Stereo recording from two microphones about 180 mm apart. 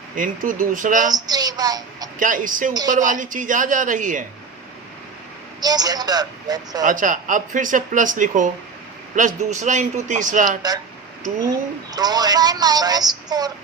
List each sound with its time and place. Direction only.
0.2 s speech: 50° right (ahead or behind)
1.1 s a woman's voice: 20° right (ahead or behind)
2.1 s speech: 50° right (ahead or behind)
5.5 s a woman's voice: 20° right (ahead or behind)
6.8 s speech: 45° right (ahead or behind)
11.9 s a woman's voice: 20° right (ahead or behind)